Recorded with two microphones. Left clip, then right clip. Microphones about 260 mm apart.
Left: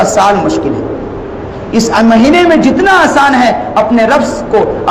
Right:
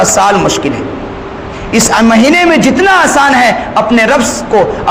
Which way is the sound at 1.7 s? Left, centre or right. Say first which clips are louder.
Even; right.